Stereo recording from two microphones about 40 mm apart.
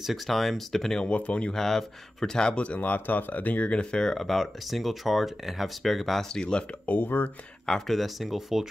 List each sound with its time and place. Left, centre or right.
0.0 s speech: centre
1.0 s speech: left
1.5 s speech: centre
2.5 s speech: left
3.7 s speech: centre
7.0 s speech: left
7.8 s speech: centre